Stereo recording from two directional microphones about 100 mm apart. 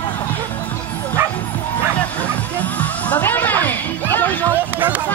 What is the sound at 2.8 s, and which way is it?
Music, 15° left (ahead or behind).